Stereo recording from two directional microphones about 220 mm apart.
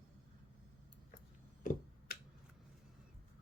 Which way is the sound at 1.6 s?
40° left (ahead or behind).